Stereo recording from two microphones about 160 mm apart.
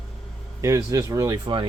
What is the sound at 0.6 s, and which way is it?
Speech, 20° right (ahead or behind).